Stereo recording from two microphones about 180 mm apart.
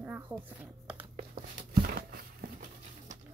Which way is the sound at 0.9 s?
40° right (ahead or behind).